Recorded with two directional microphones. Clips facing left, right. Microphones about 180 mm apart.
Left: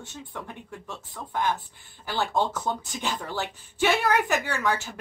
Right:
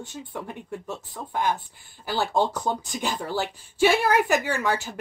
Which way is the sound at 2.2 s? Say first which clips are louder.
Right 2 dB; 35° right (ahead or behind).